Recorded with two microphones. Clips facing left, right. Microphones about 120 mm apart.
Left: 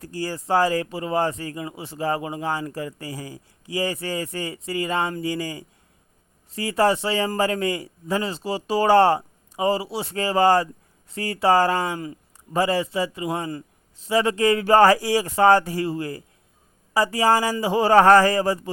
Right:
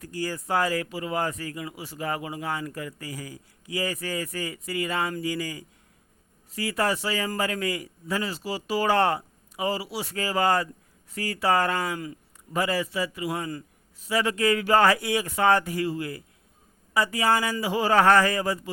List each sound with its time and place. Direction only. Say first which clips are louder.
0.0 s speech: left 2 dB; 30° left (ahead or behind)